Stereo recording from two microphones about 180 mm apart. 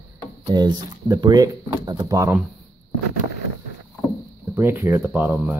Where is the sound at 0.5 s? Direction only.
20° right (ahead or behind).